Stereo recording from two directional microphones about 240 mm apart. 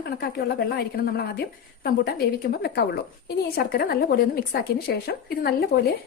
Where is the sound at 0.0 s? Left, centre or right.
Left.